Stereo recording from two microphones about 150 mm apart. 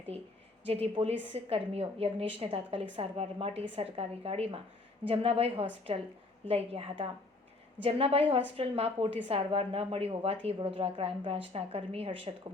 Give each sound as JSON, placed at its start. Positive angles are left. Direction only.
{"t": 0.7, "sound": "a woman's voice", "side_deg": -40}